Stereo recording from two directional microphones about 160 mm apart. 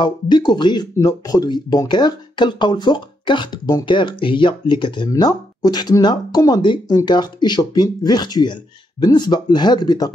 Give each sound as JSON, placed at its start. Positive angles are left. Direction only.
{"t": 0.0, "sound": "speech", "side_deg": 25}